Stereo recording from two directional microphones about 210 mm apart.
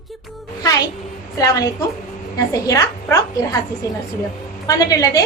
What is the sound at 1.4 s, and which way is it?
A woman's voice, 15° left (ahead or behind).